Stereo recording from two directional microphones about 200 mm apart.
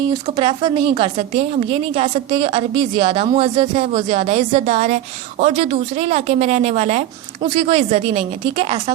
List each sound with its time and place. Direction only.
0.1 s a woman's voice: 25° right (ahead or behind)